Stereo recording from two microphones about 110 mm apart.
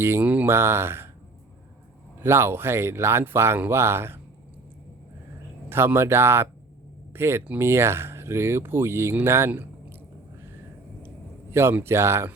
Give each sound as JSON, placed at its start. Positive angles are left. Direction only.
{"t": 0.0, "sound": "speech", "side_deg": -20}
{"t": 2.2, "sound": "speech", "side_deg": -20}
{"t": 5.6, "sound": "speech", "side_deg": -20}
{"t": 11.5, "sound": "speech", "side_deg": -20}